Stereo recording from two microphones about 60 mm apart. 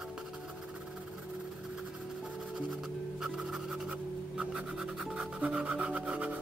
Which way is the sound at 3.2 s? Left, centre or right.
Centre.